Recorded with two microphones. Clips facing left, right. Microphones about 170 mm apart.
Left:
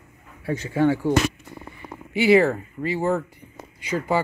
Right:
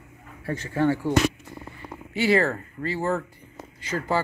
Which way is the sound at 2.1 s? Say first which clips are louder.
Left 5 dB; 15° left (ahead or behind).